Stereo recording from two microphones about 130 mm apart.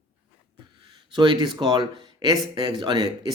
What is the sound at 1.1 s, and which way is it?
Speech, 35° right (ahead or behind).